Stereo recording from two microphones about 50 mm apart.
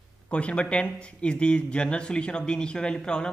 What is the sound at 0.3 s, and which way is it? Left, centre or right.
Speech, left.